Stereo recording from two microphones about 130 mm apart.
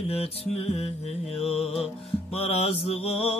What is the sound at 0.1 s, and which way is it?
Mantra, 50° left (ahead or behind).